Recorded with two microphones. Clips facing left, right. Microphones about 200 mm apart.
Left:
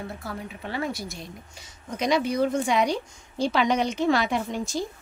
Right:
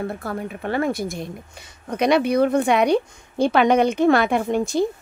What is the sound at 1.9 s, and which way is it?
A woman's voice, 65° right (ahead or behind).